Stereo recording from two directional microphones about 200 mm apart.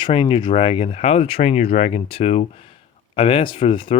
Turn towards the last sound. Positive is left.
turn(degrees=25)  # may be behind; listen again after turning